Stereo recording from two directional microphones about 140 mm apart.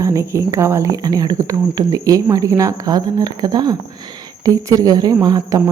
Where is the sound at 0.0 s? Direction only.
20° right (ahead or behind).